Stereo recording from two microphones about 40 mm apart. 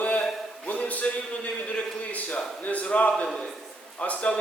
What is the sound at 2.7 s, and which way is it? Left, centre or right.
Speech, left.